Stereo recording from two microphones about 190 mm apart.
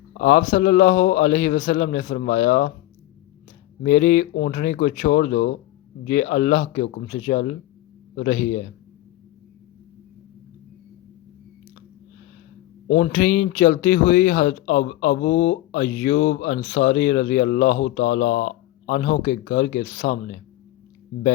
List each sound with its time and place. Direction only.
0.1 s speech: 45° left (ahead or behind)
3.8 s speech: 45° left (ahead or behind)
12.9 s speech: 50° left (ahead or behind)